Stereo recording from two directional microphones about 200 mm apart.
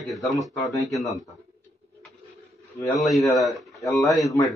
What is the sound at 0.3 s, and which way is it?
Speech, centre (ahead or behind).